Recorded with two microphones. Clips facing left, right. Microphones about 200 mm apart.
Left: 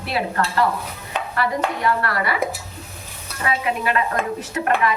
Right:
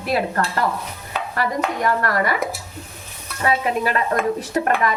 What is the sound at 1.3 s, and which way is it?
A woman's voice, 45° right (ahead or behind).